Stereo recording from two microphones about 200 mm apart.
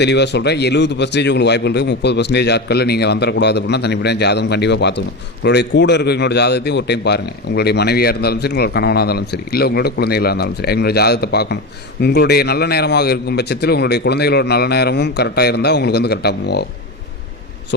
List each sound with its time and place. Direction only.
0.0 s a man's voice: 60° left (ahead or behind)